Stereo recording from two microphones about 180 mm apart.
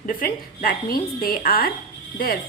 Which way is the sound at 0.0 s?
50° left (ahead or behind).